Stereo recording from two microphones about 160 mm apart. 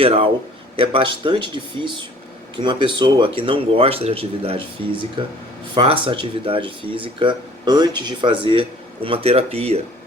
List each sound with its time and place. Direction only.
0.0 s speech: 35° right (ahead or behind)